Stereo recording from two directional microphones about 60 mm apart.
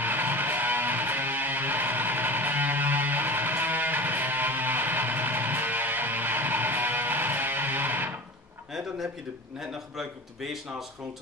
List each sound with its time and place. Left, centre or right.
0.0 s music: right
9.6 s a man's voice: centre